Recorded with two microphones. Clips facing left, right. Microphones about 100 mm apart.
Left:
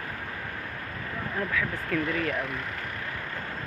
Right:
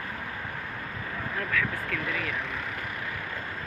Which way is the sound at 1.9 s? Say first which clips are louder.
Left 5 dB; 40° left (ahead or behind).